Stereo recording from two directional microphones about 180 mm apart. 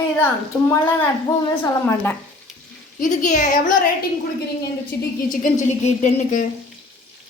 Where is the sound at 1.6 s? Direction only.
10° left (ahead or behind).